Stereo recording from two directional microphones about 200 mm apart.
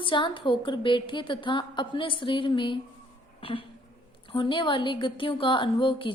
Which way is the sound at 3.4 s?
25° left (ahead or behind).